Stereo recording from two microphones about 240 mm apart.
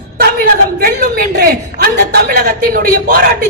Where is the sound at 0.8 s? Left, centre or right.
Right.